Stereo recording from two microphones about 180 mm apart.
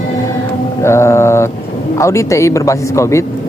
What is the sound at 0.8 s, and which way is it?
Mantra, 15° left (ahead or behind).